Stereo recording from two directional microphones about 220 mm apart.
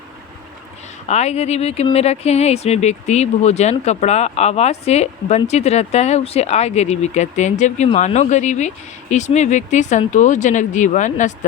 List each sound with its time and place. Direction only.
1.0 s speech: 30° left (ahead or behind)